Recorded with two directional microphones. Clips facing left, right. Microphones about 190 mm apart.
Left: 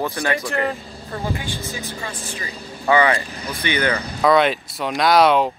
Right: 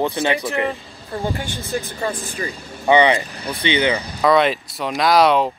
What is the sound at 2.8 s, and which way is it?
Speech, 20° right (ahead or behind).